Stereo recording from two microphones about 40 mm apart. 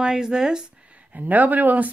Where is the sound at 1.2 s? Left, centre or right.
Right.